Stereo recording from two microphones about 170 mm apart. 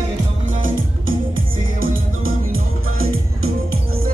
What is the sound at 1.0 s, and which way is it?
Music, 55° right (ahead or behind).